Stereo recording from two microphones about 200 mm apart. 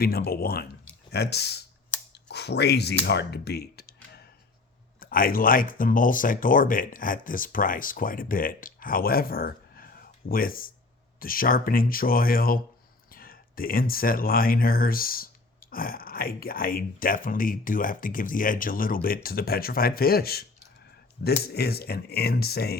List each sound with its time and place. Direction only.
0.0 s speech: 50° left (ahead or behind)
21.4 s speech: 50° left (ahead or behind)